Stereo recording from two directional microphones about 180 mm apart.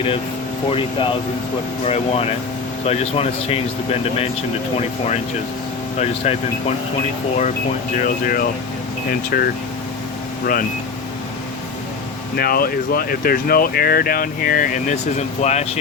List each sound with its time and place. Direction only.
0.7 s speech: 30° left (ahead or behind)
6.0 s speech: 35° left (ahead or behind)
7.9 s speech: 50° left (ahead or behind)
12.4 s speech: 55° left (ahead or behind); by 15.8 s 40° left (ahead or behind)